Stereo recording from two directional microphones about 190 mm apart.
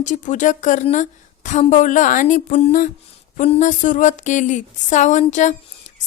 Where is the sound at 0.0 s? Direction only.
40° left (ahead or behind).